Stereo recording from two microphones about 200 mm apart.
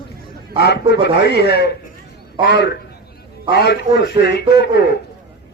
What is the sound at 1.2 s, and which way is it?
Speech, 55° left (ahead or behind).